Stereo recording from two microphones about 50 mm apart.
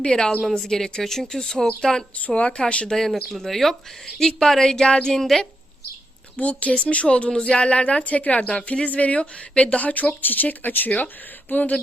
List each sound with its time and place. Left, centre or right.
0.0 s speech: centre
2.2 s speech: left
2.9 s speech: centre
6.3 s speech: left